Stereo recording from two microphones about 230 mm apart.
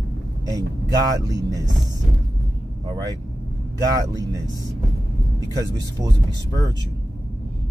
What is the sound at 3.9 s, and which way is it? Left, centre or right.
Speech, centre.